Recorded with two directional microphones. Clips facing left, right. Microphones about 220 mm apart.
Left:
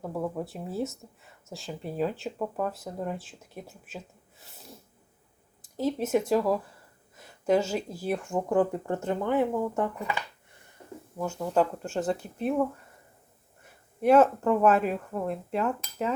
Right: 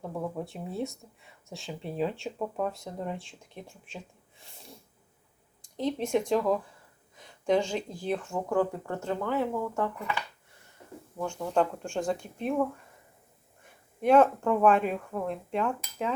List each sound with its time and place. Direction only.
0.1 s speech: 5° left (ahead or behind)
11.2 s speech: 5° left (ahead or behind)
14.0 s speech: 5° left (ahead or behind)